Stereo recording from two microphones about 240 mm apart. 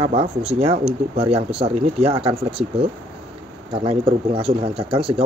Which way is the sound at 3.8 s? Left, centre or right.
Right.